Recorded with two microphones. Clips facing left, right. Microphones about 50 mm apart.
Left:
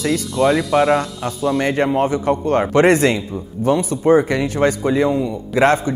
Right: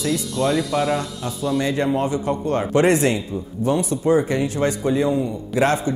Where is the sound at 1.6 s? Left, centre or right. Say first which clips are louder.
Left 4 dB; left.